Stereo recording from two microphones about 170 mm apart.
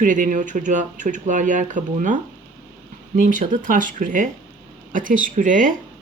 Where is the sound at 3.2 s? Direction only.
50° right (ahead or behind).